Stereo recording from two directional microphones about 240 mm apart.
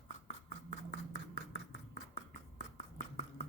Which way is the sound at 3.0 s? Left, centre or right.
Left.